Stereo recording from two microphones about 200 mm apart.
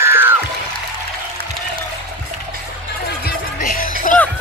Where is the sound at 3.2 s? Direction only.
45° left (ahead or behind).